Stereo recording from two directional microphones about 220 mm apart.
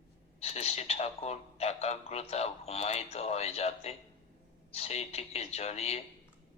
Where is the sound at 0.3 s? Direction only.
30° left (ahead or behind).